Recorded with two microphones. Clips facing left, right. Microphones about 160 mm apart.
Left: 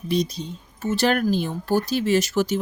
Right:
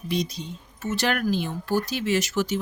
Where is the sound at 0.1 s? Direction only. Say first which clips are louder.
Left 4 dB; 35° left (ahead or behind).